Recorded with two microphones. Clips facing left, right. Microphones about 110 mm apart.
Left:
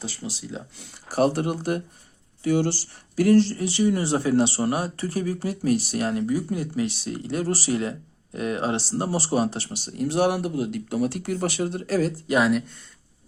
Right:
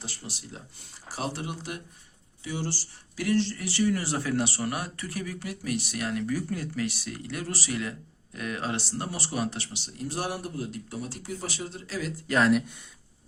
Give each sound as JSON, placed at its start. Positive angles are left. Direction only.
{"t": 1.0, "sound": "speech", "side_deg": 55}
{"t": 3.2, "sound": "speech", "side_deg": 40}
{"t": 3.6, "sound": "speech", "side_deg": 20}
{"t": 10.0, "sound": "speech", "side_deg": 75}
{"t": 12.5, "sound": "speech", "side_deg": 0}